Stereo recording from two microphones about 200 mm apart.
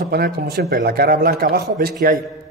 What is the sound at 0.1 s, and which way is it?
A man's voice, 50° right (ahead or behind).